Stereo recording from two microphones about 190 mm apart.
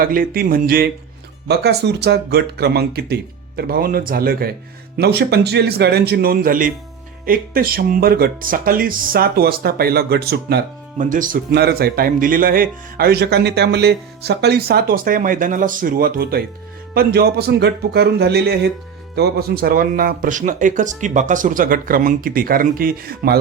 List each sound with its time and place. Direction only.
0.0 s speech: 50° right (ahead or behind)
1.5 s speech: 60° right (ahead or behind)
10.9 s speech: 45° right (ahead or behind)